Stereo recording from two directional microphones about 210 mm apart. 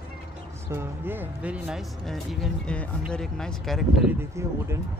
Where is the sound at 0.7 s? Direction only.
10° right (ahead or behind).